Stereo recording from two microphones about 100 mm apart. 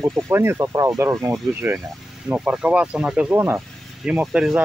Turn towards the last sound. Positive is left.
turn(degrees=-10)  # may be behind; listen again after turning